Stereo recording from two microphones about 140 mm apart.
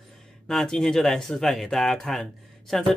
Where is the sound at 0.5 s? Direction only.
Centre (ahead or behind).